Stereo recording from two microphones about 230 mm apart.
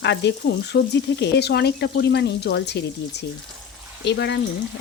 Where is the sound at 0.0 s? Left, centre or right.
Left.